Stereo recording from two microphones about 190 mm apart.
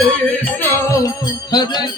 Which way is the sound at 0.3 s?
15° left (ahead or behind).